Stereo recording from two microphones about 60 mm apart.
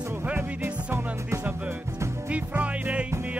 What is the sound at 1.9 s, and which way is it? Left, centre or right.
Music, right.